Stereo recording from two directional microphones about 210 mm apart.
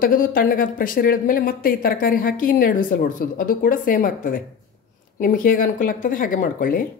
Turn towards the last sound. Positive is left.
turn(degrees=40)  # may be behind; listen again after turning